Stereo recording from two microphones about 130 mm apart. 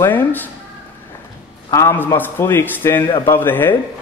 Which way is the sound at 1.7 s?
20° left (ahead or behind).